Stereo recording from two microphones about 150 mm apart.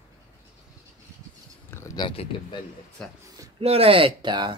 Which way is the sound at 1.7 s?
20° left (ahead or behind).